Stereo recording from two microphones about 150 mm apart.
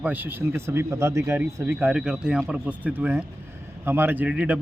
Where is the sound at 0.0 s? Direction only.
10° right (ahead or behind).